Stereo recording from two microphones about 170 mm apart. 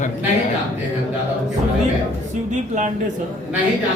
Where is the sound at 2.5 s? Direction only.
45° right (ahead or behind).